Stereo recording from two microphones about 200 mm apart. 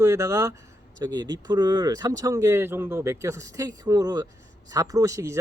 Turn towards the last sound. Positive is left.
turn(degrees=-15)  # may be behind; listen again after turning